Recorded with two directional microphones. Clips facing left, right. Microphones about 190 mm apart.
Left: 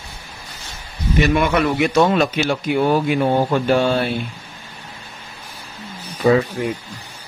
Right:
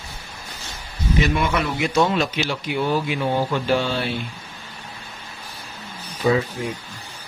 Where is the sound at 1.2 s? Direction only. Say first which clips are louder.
Left 7 dB; 55° left (ahead or behind).